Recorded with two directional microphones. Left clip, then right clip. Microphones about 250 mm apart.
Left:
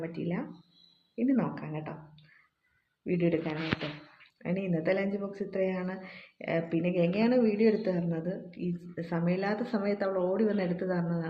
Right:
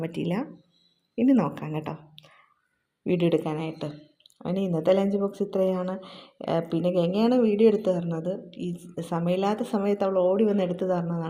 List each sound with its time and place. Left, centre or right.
0.0 s speech: right
3.0 s a woman's voice: right
6.5 s speech: centre
6.9 s a woman's voice: right
7.3 s speech: centre
7.6 s a woman's voice: right
8.6 s speech: centre
9.0 s a woman's voice: right